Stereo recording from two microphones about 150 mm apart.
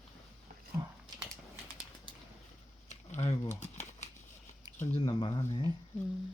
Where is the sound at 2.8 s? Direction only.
50° left (ahead or behind).